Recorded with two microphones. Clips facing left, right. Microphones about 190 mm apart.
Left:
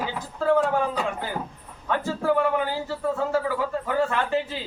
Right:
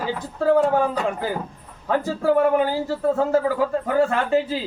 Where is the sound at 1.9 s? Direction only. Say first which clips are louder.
Right 4 dB; 35° right (ahead or behind).